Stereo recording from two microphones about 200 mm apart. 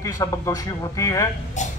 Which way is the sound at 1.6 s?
35° left (ahead or behind).